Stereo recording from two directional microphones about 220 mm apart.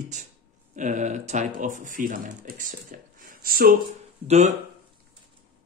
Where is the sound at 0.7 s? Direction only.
35° right (ahead or behind).